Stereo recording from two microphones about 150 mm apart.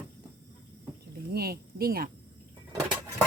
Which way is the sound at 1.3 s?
90° right.